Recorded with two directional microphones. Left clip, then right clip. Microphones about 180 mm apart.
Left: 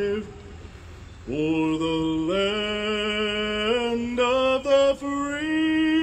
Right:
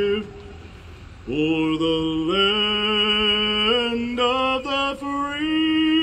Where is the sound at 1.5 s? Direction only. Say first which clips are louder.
Right 2 dB; 25° right (ahead or behind).